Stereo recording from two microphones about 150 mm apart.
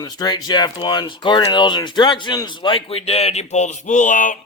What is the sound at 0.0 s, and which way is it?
Speech, 25° left (ahead or behind).